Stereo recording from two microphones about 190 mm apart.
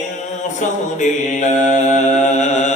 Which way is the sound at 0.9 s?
40° left (ahead or behind).